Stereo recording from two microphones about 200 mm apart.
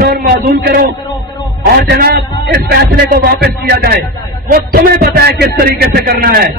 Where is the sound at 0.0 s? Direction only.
50° right (ahead or behind).